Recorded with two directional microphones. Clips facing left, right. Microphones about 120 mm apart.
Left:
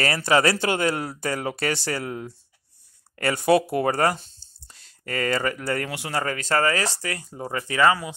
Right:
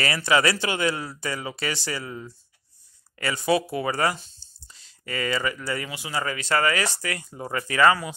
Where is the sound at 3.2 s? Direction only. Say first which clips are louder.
Left 4 dB; 55° left (ahead or behind).